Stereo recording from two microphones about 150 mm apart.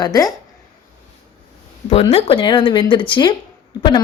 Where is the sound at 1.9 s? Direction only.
40° left (ahead or behind).